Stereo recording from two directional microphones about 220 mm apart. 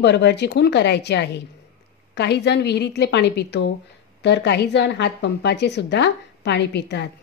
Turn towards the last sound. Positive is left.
turn(degrees=50)  # may be behind; listen again after turning